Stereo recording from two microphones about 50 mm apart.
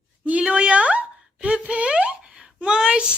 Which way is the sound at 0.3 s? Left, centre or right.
Right.